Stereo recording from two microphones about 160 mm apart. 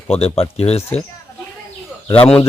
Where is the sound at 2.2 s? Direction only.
10° left (ahead or behind).